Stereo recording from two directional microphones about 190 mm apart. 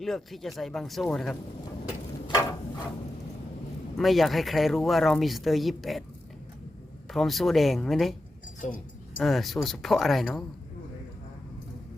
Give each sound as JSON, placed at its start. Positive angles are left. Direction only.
{"t": 0.0, "sound": "speech", "side_deg": 0}
{"t": 2.2, "sound": "a sound", "side_deg": 20}
{"t": 3.9, "sound": "speech", "side_deg": 0}
{"t": 7.1, "sound": "speech", "side_deg": 0}
{"t": 9.2, "sound": "speech", "side_deg": 0}